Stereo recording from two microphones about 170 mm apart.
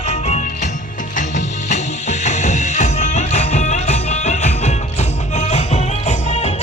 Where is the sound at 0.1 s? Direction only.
40° left (ahead or behind).